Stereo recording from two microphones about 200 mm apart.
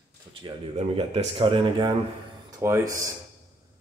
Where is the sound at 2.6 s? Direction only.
15° right (ahead or behind).